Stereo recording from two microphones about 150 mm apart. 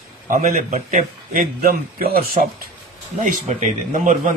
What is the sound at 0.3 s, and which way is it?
A man's voice, 55° right (ahead or behind).